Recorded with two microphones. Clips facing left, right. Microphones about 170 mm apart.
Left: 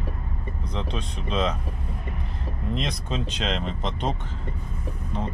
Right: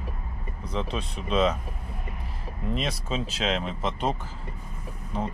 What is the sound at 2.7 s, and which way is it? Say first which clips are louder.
Speech: even; 5° right (ahead or behind).